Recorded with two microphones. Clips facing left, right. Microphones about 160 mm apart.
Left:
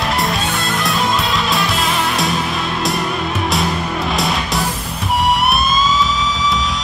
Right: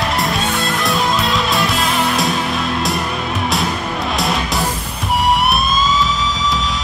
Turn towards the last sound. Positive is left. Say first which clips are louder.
# left 1 dB
turn(degrees=0)  # may be behind; listen again after turning